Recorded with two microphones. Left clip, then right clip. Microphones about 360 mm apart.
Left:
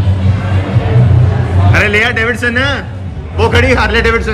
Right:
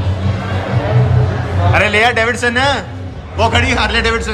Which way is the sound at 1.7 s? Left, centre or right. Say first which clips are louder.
Left 1 dB; centre.